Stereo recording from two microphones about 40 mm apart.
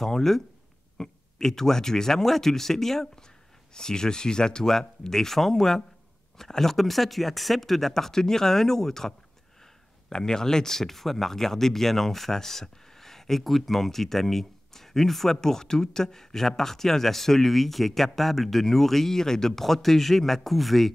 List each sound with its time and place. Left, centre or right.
0.0 s speech: centre